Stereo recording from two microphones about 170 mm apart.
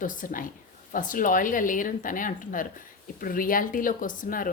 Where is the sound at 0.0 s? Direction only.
50° left (ahead or behind).